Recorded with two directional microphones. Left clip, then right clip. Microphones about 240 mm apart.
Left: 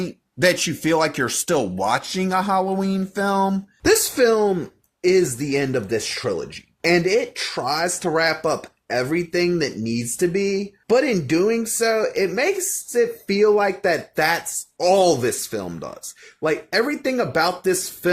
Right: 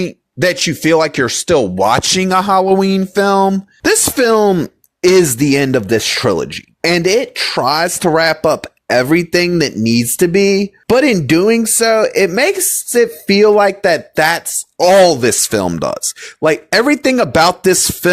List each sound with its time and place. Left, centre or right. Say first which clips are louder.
0.0 s speech: right 4 dB; right